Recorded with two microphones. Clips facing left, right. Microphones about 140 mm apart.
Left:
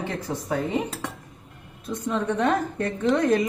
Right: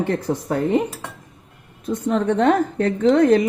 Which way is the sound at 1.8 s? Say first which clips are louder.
Right 6 dB; 65° right (ahead or behind).